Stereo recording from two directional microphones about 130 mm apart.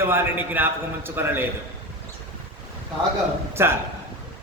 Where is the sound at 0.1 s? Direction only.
15° right (ahead or behind).